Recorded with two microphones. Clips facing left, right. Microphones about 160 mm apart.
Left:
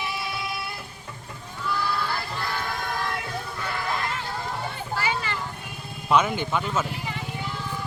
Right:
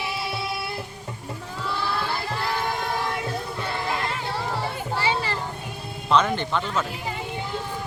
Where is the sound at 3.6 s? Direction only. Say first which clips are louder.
Right 2 dB; 25° right (ahead or behind).